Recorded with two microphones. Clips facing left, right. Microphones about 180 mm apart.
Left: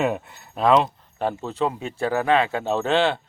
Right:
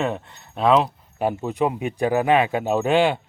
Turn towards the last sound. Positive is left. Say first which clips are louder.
# right 2 dB
turn(degrees=-10)  # may be behind; listen again after turning